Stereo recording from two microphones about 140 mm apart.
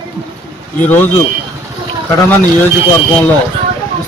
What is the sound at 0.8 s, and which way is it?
Speech, 15° left (ahead or behind).